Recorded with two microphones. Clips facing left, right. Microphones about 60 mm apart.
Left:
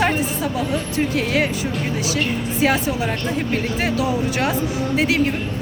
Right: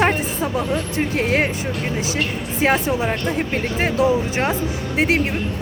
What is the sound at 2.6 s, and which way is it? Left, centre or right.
A woman's voice, right.